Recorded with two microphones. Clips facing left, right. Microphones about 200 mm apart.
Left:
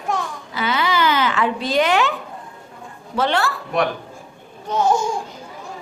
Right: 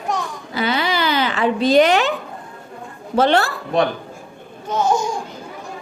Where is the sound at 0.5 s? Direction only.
35° right (ahead or behind).